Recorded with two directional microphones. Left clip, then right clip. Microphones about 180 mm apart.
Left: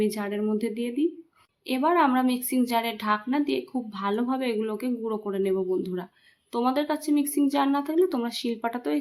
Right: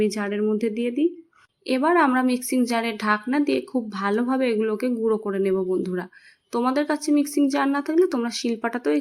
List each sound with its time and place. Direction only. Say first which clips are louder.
0.0 s a woman's voice: right 4 dB; 15° right (ahead or behind)